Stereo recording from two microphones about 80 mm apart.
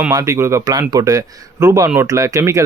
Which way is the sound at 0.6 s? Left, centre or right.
Right.